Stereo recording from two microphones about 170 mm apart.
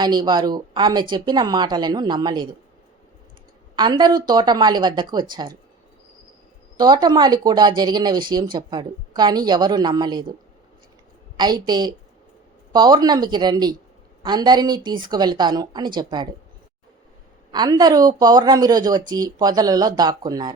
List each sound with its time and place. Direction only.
0.0 s speech: 25° right (ahead or behind)
3.8 s speech: 25° right (ahead or behind)
6.7 s speech: 25° right (ahead or behind)
11.3 s speech: 25° right (ahead or behind)
17.5 s speech: 25° right (ahead or behind)